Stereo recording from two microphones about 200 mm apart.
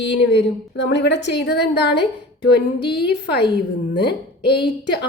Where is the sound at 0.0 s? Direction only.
60° left (ahead or behind).